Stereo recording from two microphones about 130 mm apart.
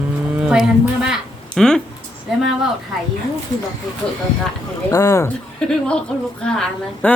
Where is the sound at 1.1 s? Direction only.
5° left (ahead or behind).